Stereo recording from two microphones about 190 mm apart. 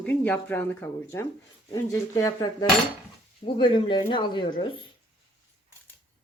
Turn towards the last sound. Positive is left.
turn(degrees=25)  # may be behind; listen again after turning